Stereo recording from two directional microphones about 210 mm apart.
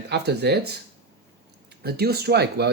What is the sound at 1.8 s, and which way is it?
Speech, 50° right (ahead or behind).